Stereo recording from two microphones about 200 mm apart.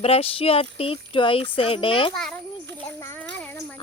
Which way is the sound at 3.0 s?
15° left (ahead or behind).